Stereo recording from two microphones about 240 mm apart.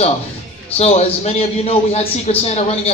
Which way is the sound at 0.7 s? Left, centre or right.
Left.